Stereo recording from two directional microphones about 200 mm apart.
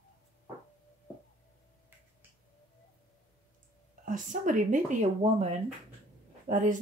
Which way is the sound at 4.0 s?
40° right (ahead or behind).